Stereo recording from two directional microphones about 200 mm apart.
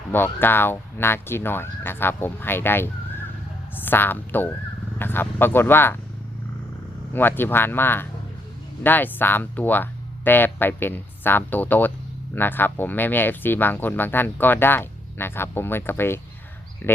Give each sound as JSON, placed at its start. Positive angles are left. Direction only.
{"t": 0.1, "sound": "speech", "side_deg": 10}
{"t": 7.1, "sound": "speech", "side_deg": 10}